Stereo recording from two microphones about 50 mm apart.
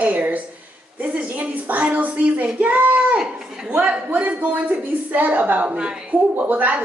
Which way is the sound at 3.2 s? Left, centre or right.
Centre.